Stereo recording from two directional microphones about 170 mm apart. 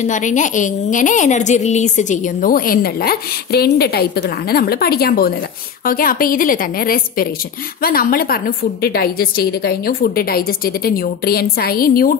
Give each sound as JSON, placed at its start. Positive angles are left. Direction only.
{"t": 0.0, "sound": "a woman's voice", "side_deg": 45}